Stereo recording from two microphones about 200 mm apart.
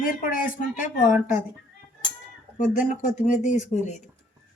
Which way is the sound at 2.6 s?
40° left (ahead or behind).